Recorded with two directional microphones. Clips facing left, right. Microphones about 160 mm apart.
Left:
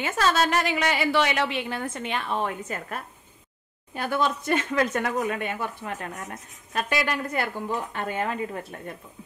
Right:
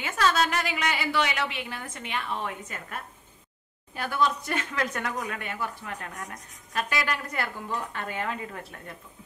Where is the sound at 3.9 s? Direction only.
25° left (ahead or behind).